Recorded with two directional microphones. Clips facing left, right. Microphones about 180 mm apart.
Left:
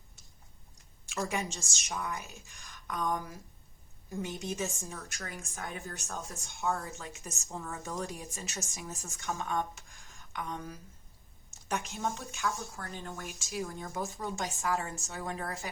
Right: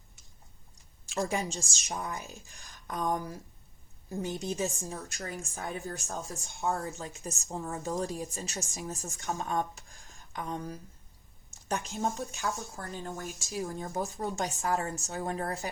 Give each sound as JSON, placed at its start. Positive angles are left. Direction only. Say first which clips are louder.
{"t": 1.0, "sound": "a woman's voice", "louder": "right 3 dB", "side_deg": -35}